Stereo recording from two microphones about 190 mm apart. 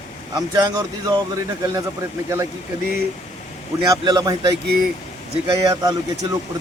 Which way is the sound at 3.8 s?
20° right (ahead or behind).